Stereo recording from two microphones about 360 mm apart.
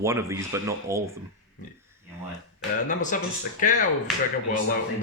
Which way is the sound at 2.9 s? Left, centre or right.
Left.